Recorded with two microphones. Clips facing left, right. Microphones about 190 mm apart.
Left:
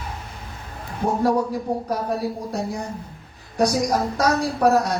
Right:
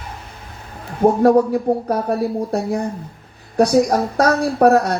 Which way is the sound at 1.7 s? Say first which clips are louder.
Right 7 dB; 60° right (ahead or behind).